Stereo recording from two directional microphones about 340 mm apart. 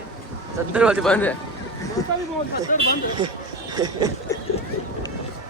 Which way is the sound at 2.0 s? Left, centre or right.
Centre.